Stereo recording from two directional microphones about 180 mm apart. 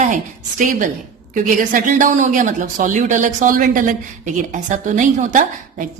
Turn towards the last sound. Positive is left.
turn(degrees=-45)  # may be behind; listen again after turning